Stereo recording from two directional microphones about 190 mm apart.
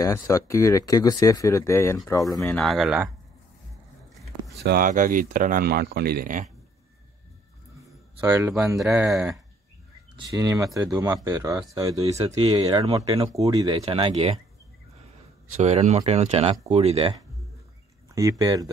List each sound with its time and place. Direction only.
0.0 s speech: 15° left (ahead or behind)
2.4 s speech: 5° left (ahead or behind)
4.6 s speech: 45° right (ahead or behind)
8.2 s speech: 10° right (ahead or behind)
8.8 s speech: centre (ahead or behind)
10.1 s speech: 20° right (ahead or behind)
15.5 s speech: 35° right (ahead or behind)
18.1 s speech: 15° right (ahead or behind)